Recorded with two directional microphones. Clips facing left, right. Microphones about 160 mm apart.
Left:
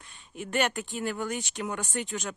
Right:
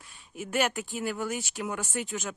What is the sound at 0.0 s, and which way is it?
Speech, 5° right (ahead or behind).